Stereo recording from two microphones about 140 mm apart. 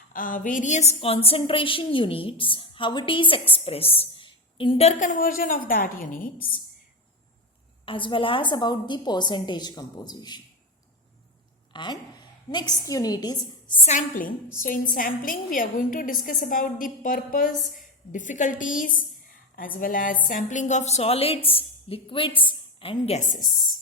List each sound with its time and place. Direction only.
0.1 s a woman's voice: 75° left (ahead or behind); by 4.9 s 40° left (ahead or behind)
4.9 s a woman's voice: 70° left (ahead or behind); by 6.2 s 85° left
7.9 s a woman's voice: 35° left (ahead or behind)
11.7 s a woman's voice: 30° left (ahead or behind)
13.8 s a woman's voice: 75° left (ahead or behind)
19.5 s a woman's voice: 85° left
20.2 s a woman's voice: 65° left (ahead or behind); by 23.2 s 45° left (ahead or behind)